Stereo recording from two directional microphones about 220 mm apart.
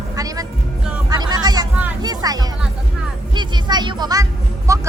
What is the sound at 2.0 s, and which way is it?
Music, 15° right (ahead or behind).